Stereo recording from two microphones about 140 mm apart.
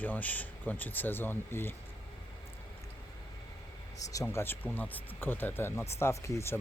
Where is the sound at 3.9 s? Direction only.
20° left (ahead or behind).